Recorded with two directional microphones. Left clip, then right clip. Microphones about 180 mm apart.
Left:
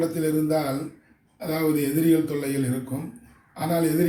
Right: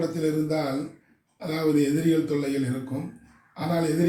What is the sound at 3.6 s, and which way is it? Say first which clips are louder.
Speech: left 2 dB; 15° left (ahead or behind).